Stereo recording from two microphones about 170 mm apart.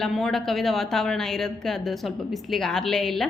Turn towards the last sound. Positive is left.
turn(degrees=5)  # may be behind; listen again after turning